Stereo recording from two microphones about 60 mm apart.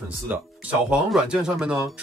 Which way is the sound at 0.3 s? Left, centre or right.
Right.